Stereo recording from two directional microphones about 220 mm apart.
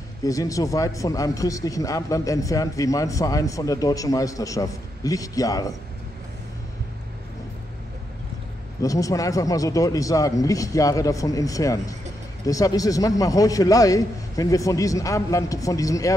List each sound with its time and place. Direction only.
0.2 s speech: 15° left (ahead or behind)
8.8 s speech: 15° left (ahead or behind)